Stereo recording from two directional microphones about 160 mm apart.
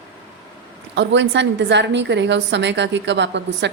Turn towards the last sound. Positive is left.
turn(degrees=-90)